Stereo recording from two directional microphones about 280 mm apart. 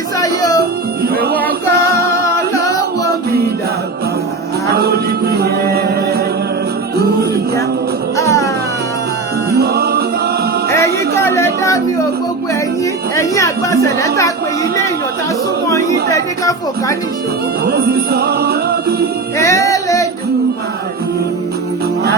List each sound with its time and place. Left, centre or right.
0.2 s music: centre
1.0 s music: right
1.4 s singing: centre
4.7 s a capella: right
8.1 s music: centre
9.6 s music: right
10.7 s music: centre
16.1 s speech: centre
17.7 s music: right
19.4 s music: centre